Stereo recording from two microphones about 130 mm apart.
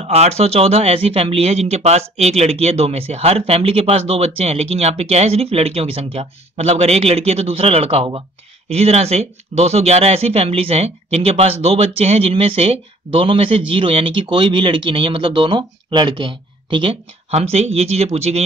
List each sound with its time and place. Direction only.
0.0 s speech: 55° right (ahead or behind)